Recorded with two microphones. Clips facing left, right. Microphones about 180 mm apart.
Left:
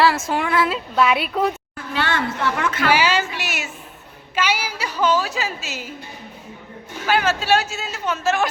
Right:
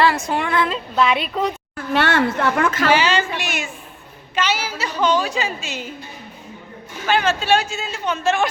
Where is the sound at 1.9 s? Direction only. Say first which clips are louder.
Right 5 dB; 65° right (ahead or behind); by 2.9 s 45° right (ahead or behind).